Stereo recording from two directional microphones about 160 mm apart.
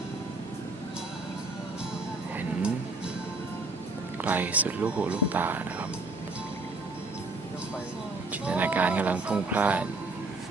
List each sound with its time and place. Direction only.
2.4 s music: 5° right (ahead or behind)
4.2 s speech: 10° right (ahead or behind)
8.3 s speech: 10° right (ahead or behind)